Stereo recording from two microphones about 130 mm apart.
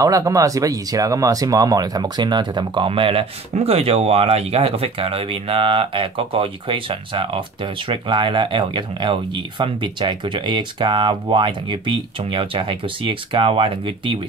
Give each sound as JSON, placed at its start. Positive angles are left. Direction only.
{"t": 0.0, "sound": "speech", "side_deg": -25}